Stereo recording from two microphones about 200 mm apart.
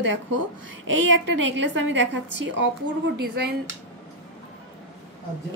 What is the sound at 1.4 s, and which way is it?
Speech, 65° right (ahead or behind).